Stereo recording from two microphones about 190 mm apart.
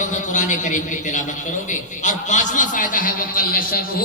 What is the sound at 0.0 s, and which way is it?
A man's voice, 40° left (ahead or behind).